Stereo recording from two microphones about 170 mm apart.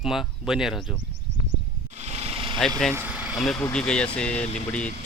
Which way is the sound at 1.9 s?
40° right (ahead or behind).